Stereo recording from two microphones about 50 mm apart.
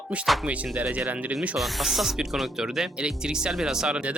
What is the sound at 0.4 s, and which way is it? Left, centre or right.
Speech, right.